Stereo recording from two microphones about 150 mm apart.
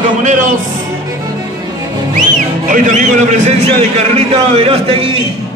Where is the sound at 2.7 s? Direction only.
55° right (ahead or behind).